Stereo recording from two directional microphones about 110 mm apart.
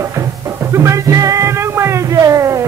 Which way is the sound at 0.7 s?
25° right (ahead or behind).